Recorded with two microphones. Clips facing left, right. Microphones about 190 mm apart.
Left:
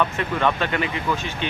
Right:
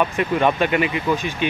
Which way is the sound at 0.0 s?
15° right (ahead or behind).